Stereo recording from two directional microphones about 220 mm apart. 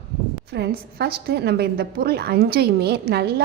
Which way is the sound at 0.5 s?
50° right (ahead or behind).